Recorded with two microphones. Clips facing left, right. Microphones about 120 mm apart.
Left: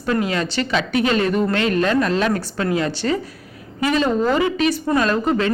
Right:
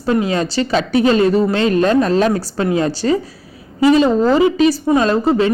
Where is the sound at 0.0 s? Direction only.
25° right (ahead or behind).